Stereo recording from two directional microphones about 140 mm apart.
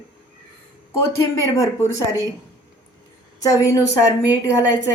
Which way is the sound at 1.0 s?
20° left (ahead or behind).